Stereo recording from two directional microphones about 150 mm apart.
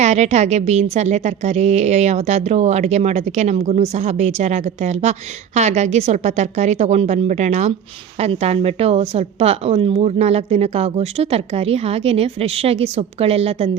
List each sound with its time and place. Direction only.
0.0 s a woman's voice: 50° right (ahead or behind)